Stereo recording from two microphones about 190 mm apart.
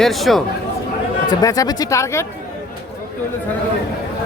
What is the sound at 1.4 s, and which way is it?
Speech, 20° left (ahead or behind).